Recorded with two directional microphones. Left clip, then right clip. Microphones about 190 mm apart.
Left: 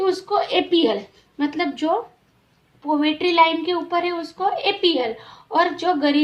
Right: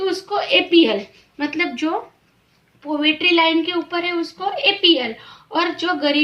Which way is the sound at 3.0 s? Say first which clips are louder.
Right 5 dB; 55° left (ahead or behind).